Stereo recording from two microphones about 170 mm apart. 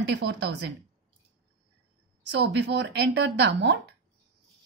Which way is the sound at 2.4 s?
85° right.